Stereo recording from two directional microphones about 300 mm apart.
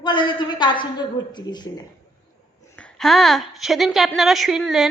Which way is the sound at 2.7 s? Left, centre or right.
Centre.